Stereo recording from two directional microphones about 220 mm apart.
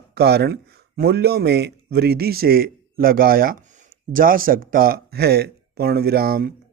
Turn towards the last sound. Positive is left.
turn(degrees=-45)  # may be behind; listen again after turning